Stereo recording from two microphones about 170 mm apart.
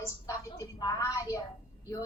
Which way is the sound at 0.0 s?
20° left (ahead or behind).